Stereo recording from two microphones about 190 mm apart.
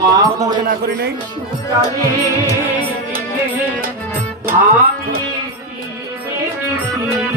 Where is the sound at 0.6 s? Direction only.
55° right (ahead or behind).